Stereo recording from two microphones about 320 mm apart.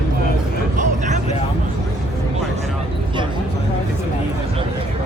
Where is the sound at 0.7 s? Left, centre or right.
Right.